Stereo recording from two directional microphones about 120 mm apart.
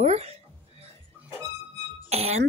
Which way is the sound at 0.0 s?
55° right (ahead or behind).